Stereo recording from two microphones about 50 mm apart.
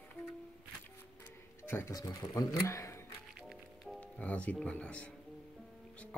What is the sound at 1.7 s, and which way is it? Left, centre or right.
Speech, left.